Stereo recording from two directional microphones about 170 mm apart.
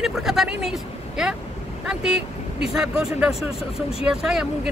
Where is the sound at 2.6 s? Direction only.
5° right (ahead or behind).